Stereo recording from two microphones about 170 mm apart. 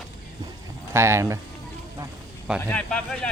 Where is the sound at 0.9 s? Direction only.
15° right (ahead or behind).